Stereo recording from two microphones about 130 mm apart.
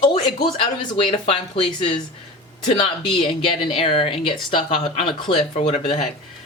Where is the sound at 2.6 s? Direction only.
40° left (ahead or behind).